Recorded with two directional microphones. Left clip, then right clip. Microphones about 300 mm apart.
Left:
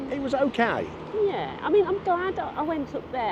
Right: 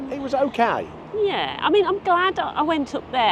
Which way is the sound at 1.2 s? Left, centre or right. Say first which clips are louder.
Right 7 dB; centre.